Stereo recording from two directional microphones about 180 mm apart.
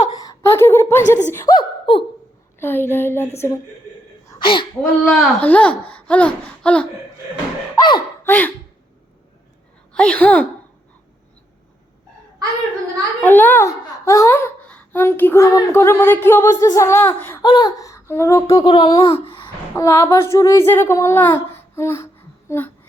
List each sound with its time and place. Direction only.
0.1 s a sound: 15° left (ahead or behind)
1.3 s speech: 15° left (ahead or behind)
1.5 s speech: 30° left (ahead or behind)
2.6 s speech: 10° left (ahead or behind)
4.3 s hiccup: 25° left (ahead or behind)
4.8 s speech: centre (ahead or behind)
7.8 s speech: 20° left (ahead or behind)
8.3 s speech: 10° left (ahead or behind)
9.9 s speech: 5° left (ahead or behind)
13.2 s speech: 10° left (ahead or behind)
17.4 s speech: 25° left (ahead or behind)
19.0 s a sound: 30° left (ahead or behind)
19.7 s a woman's voice: 15° left (ahead or behind)